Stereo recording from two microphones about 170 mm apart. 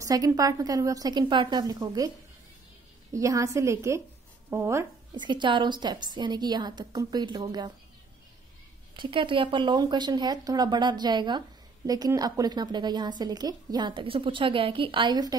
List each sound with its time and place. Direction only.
0.0 s speech: 20° right (ahead or behind)
3.1 s a woman's voice: 20° right (ahead or behind)
5.1 s speech: 25° right (ahead or behind)
8.9 s speech: 30° right (ahead or behind)